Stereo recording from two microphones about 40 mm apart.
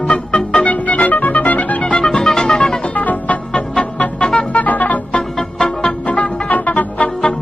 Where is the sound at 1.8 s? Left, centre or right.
Left.